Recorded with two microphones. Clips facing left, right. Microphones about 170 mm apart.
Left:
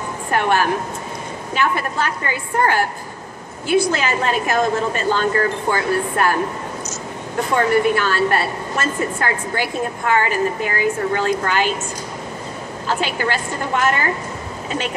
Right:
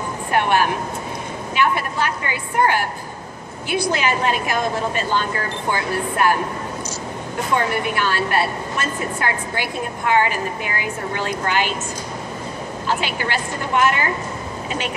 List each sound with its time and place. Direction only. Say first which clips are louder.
0.3 s a woman's voice: left 1 dB; 45° left (ahead or behind)
7.5 s a woman's voice: left 5 dB; 45° left (ahead or behind)
12.8 s a woman's voice: left 3 dB; 45° left (ahead or behind)